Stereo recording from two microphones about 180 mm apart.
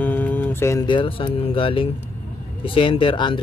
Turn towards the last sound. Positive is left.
turn(degrees=25)  # may be behind; listen again after turning